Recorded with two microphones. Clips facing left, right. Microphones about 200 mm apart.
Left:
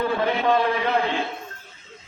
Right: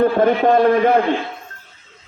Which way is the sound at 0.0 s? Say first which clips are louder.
Right 8 dB; 50° right (ahead or behind).